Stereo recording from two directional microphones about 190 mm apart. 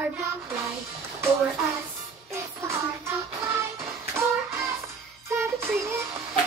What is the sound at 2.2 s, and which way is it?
Child singing, 15° right (ahead or behind).